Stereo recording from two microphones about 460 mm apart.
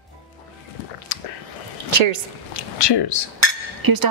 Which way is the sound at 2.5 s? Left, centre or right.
Left.